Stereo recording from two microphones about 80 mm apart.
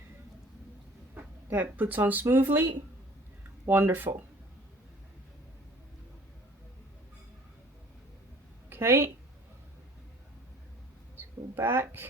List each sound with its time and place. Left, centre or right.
1.1 s speech: right
8.7 s a woman's voice: right
11.2 s speech: right